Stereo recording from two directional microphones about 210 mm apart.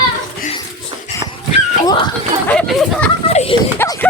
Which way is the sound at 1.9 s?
20° left (ahead or behind).